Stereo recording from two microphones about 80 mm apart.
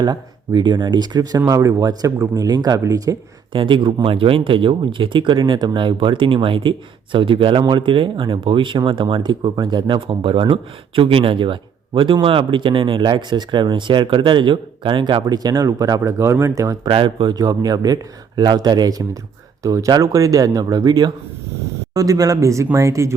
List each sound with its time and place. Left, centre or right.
0.0 s speech: right
1.5 s speech: right
3.5 s speech: right
15.3 s speech: right
16.8 s speech: right
17.3 s speech: right
19.6 s speech: right